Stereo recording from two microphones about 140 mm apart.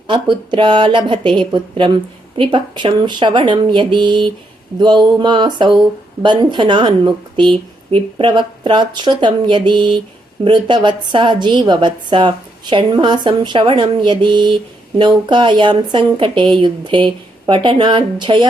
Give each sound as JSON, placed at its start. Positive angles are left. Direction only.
{"t": 0.1, "sound": "a woman's voice", "side_deg": -35}